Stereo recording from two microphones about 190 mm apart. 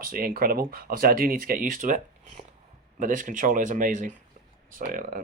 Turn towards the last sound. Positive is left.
turn(degrees=-45)  # may be behind; listen again after turning